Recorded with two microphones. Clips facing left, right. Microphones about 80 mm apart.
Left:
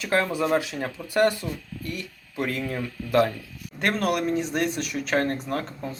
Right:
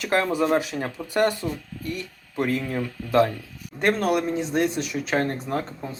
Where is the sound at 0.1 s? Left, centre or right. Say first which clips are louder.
Right 1 dB; right.